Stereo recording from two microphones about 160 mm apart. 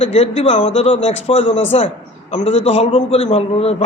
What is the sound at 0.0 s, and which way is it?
A man's voice, 40° left (ahead or behind).